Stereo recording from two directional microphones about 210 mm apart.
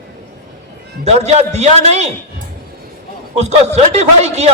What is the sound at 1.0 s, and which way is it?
A man's voice, 30° right (ahead or behind).